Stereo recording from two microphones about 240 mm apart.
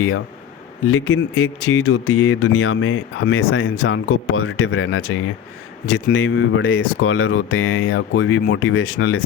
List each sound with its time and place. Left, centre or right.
0.9 s speech: left